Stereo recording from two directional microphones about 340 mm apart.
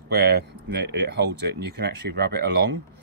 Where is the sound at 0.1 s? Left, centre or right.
Right.